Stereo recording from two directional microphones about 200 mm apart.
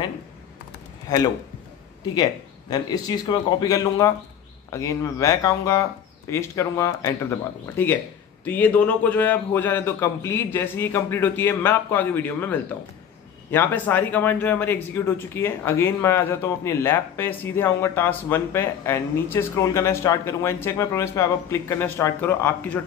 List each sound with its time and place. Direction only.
1.1 s speech: 20° left (ahead or behind)
2.7 s speech: 20° left (ahead or behind)